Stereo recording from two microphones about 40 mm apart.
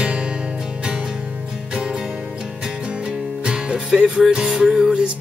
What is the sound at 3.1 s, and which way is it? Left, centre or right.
Music, right.